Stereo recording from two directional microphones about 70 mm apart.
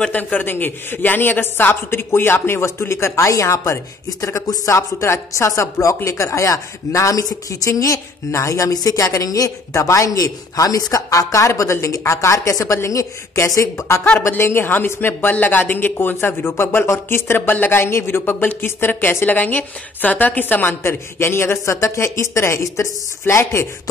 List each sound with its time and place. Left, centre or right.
0.1 s a woman's voice: left
4.4 s a woman's voice: left